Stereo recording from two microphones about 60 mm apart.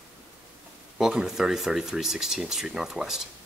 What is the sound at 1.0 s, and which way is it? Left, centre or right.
Speech, centre.